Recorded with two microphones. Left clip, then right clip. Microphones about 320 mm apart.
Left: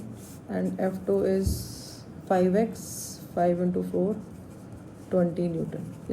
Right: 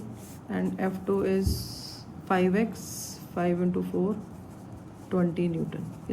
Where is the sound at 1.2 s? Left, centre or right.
Centre.